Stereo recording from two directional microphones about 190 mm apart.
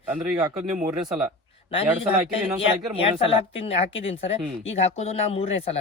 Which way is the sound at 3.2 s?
30° left (ahead or behind).